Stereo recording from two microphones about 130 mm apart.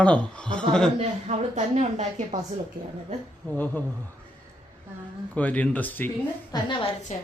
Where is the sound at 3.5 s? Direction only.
15° left (ahead or behind).